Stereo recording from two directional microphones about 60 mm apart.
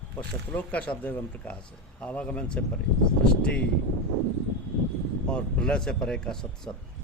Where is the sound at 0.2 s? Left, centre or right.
Left.